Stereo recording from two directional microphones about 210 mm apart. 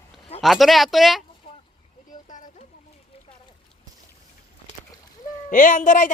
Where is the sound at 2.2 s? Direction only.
40° left (ahead or behind).